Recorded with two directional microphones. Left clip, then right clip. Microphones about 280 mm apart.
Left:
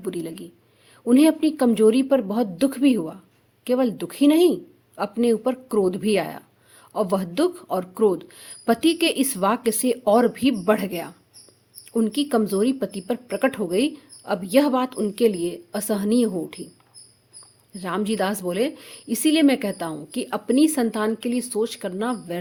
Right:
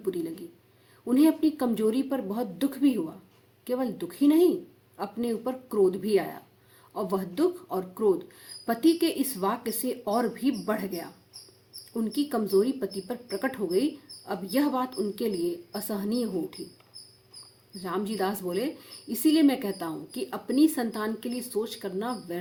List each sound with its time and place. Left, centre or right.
0.0 s speech: left
17.7 s speech: left